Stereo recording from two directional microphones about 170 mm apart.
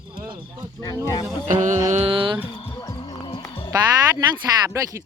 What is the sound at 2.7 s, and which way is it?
Music, 25° left (ahead or behind).